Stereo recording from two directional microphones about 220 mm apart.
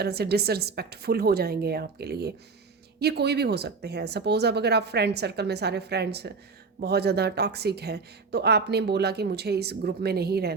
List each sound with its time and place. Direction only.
0.0 s speech: 45° right (ahead or behind)